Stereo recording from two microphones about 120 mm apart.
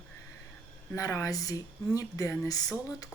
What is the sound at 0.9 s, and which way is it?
Speech, 25° left (ahead or behind).